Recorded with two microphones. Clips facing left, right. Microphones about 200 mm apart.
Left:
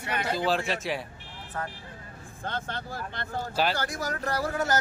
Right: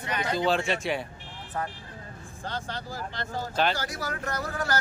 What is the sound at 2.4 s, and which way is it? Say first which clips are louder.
Speech: left 1 dB; 55° left (ahead or behind).